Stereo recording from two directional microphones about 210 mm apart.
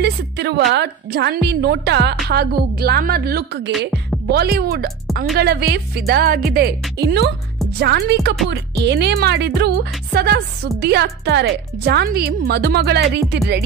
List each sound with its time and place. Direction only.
0.0 s speech: 55° right (ahead or behind)